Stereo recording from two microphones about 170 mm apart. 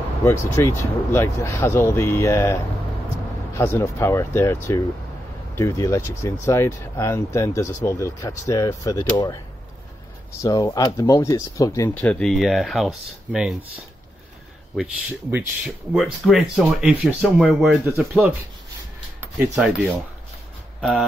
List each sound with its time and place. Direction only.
0.2 s speech: 15° left (ahead or behind)
10.4 s speech: 20° left (ahead or behind)
12.0 s speech: 5° left (ahead or behind)
15.3 s speech: 5° right (ahead or behind)
17.8 s speech: 10° right (ahead or behind)
19.3 s speech: 10° right (ahead or behind)